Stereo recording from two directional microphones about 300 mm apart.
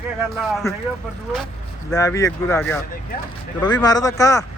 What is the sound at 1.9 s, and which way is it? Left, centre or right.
Speech, centre.